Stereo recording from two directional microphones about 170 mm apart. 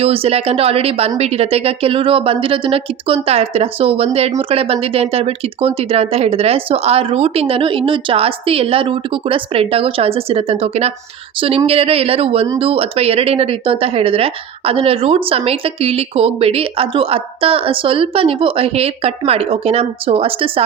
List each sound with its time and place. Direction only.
0.0 s speech: 35° right (ahead or behind)